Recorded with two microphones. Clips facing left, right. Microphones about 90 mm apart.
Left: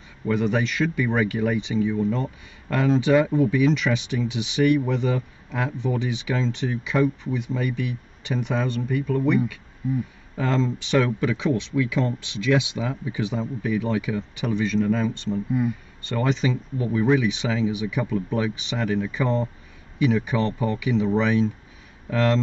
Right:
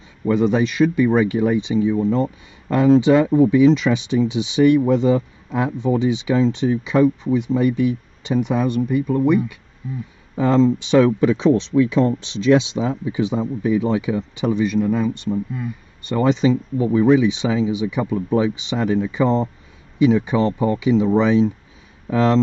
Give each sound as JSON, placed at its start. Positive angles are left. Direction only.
{"t": 0.3, "sound": "speech", "side_deg": -20}